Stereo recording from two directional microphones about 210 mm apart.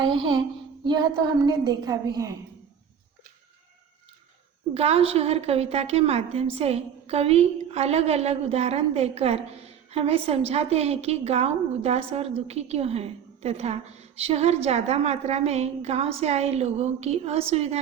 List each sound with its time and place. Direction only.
0.0 s a woman's voice: 20° right (ahead or behind)
4.7 s a woman's voice: 30° right (ahead or behind)